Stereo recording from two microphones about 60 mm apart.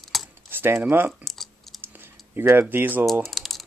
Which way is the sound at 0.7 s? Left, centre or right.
Right.